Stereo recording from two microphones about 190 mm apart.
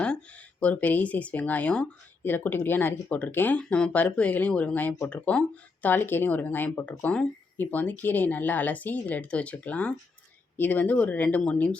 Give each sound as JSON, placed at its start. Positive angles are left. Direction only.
{"t": 0.0, "sound": "speech", "side_deg": 5}